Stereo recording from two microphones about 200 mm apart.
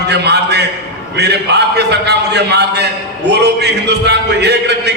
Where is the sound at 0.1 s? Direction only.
55° right (ahead or behind).